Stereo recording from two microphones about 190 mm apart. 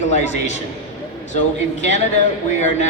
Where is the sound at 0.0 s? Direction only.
40° left (ahead or behind).